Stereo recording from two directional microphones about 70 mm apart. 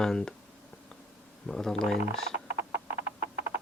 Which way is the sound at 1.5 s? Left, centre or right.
Centre.